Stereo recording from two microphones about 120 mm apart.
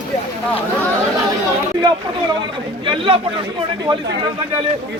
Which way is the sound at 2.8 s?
45° right (ahead or behind).